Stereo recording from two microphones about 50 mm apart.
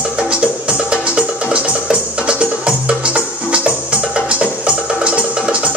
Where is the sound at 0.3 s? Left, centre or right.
Right.